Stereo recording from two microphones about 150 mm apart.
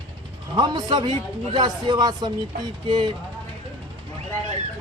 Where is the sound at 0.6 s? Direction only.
30° right (ahead or behind).